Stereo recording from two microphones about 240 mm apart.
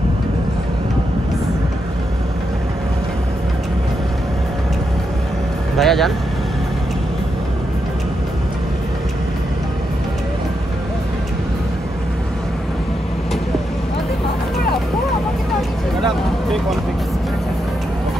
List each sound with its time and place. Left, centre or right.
5.8 s speech: centre